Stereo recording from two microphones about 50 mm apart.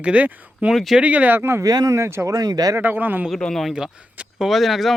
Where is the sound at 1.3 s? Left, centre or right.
Right.